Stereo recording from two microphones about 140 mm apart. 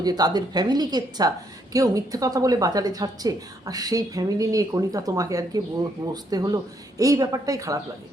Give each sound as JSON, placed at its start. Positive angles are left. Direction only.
{"t": 0.0, "sound": "a woman's voice", "side_deg": -30}